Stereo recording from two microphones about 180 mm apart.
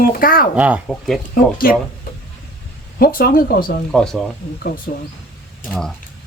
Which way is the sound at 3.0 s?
55° left (ahead or behind).